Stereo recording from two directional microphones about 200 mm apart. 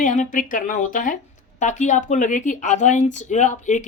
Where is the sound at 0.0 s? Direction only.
40° left (ahead or behind).